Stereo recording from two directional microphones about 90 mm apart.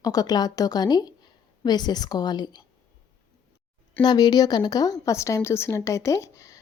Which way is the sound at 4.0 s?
50° left (ahead or behind).